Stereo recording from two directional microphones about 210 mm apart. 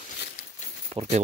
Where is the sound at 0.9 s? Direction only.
30° right (ahead or behind).